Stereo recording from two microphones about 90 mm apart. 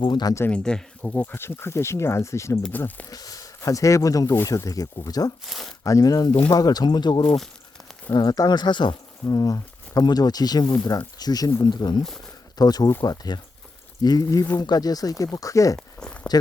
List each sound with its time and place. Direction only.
0.0 s speech: 60° left (ahead or behind)
0.4 s speech: 10° left (ahead or behind)
1.2 s speech: 25° left (ahead or behind)
2.7 s speech: 20° left (ahead or behind)
3.1 s speech: 45° left (ahead or behind)
5.5 s speech: centre (ahead or behind)
5.8 s speech: 40° left (ahead or behind); by 9.0 s 60° left (ahead or behind)
9.2 s speech: 40° left (ahead or behind)
16.0 s a sound: 10° left (ahead or behind)